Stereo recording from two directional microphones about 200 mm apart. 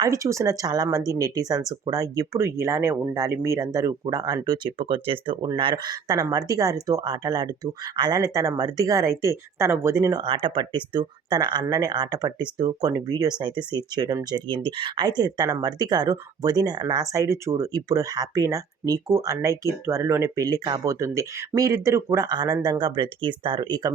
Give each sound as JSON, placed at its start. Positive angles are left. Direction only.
{"t": 0.0, "sound": "speech", "side_deg": -15}